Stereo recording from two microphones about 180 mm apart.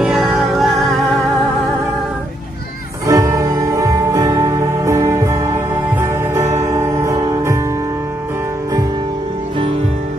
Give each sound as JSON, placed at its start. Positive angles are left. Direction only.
{"t": 0.0, "sound": "music", "side_deg": 0}
{"t": 3.1, "sound": "music", "side_deg": -20}